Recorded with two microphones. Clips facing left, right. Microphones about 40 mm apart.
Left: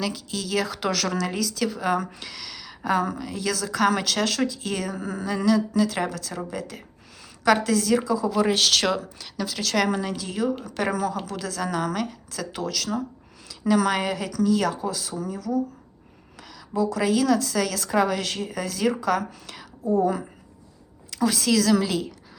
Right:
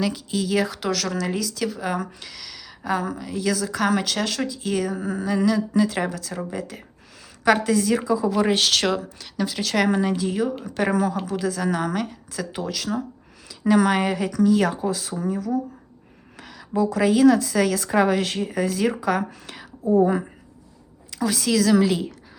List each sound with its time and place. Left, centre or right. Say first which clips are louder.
0.0 s speech: right 5 dB; centre
0.7 s a woman's voice: even; centre; by 8.3 s right
8.5 s speech: right 1 dB; centre
9.4 s a woman's voice: right 2 dB; centre
19.8 s a woman's voice: right 4 dB; right
21.1 s a woman's voice: even; centre